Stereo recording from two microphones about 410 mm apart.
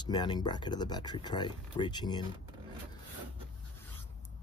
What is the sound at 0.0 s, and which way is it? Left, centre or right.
Speech, centre.